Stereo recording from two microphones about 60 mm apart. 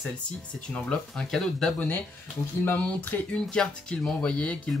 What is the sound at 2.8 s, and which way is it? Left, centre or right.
Speech, centre.